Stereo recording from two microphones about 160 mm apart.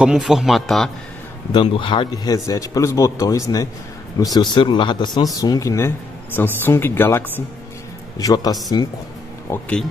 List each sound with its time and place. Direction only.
0.0 s a man's voice: 5° right (ahead or behind)
1.5 s speech: 35° left (ahead or behind)
9.5 s speech: 5° left (ahead or behind)